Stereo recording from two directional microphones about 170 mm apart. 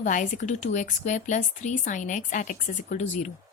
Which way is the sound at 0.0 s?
50° left (ahead or behind).